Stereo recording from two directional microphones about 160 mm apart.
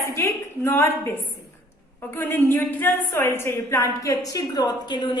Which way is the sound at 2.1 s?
10° left (ahead or behind).